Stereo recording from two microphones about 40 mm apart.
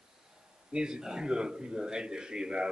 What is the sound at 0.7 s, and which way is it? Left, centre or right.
A man's voice, centre.